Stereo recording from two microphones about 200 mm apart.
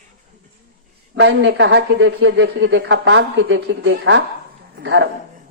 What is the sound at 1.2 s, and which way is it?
A man's voice, 60° right (ahead or behind).